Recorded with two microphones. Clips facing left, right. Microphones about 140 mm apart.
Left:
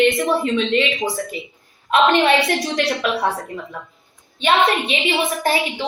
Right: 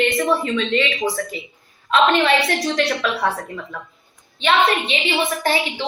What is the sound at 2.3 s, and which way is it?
Speech, centre (ahead or behind).